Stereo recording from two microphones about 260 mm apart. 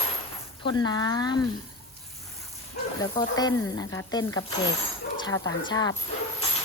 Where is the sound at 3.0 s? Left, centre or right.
Centre.